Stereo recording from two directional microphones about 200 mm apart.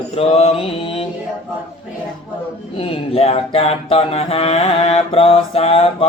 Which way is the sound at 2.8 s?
30° left (ahead or behind).